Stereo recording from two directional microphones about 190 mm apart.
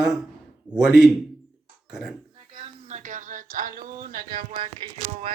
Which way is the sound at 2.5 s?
40° right (ahead or behind).